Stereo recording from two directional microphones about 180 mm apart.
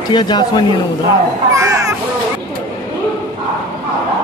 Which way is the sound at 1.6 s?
15° right (ahead or behind).